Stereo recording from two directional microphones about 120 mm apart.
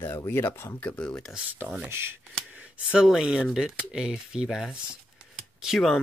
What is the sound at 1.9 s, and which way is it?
Speech, 20° right (ahead or behind).